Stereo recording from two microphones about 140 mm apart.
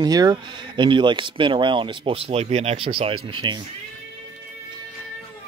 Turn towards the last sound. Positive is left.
turn(degrees=-35)  # may be behind; listen again after turning